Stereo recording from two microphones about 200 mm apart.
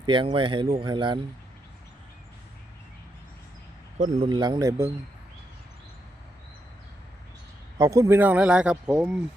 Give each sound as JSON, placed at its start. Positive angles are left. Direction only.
{"t": 0.0, "sound": "speech", "side_deg": -25}
{"t": 3.9, "sound": "a man's voice", "side_deg": -35}
{"t": 4.3, "sound": "speech", "side_deg": -20}
{"t": 7.8, "sound": "speech", "side_deg": -15}